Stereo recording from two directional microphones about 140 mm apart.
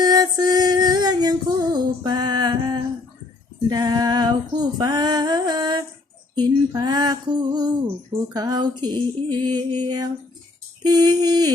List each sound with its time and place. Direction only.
0.0 s music: 30° right (ahead or behind)
3.7 s female singing: 30° right (ahead or behind)
10.8 s a sound: 30° right (ahead or behind)